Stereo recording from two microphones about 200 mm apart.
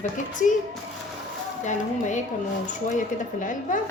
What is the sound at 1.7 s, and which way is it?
Speech, 35° left (ahead or behind).